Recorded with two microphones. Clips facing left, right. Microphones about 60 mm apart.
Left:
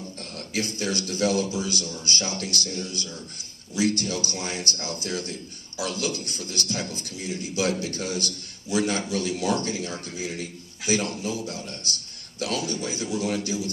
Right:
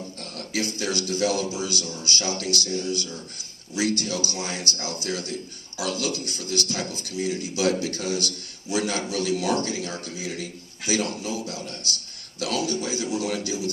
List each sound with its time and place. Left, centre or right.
0.5 s a man's voice: left